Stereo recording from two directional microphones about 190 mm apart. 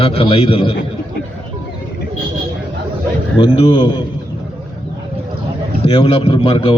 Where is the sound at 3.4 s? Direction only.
25° left (ahead or behind).